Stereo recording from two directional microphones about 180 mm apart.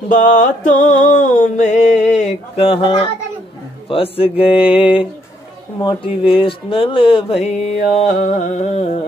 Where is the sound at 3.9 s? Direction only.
30° left (ahead or behind).